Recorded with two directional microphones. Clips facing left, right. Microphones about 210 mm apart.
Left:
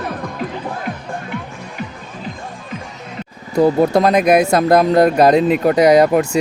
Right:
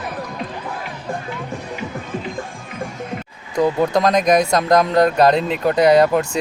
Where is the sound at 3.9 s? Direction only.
5° left (ahead or behind).